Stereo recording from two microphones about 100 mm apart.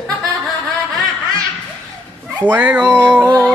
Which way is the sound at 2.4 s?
15° right (ahead or behind).